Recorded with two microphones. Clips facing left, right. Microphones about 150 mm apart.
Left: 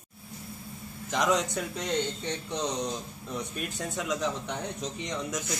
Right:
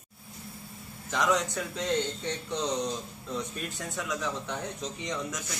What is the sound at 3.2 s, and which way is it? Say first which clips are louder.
A man's voice: even; 15° left (ahead or behind).